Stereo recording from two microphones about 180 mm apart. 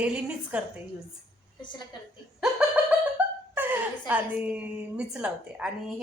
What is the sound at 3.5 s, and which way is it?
A woman's voice, 10° right (ahead or behind).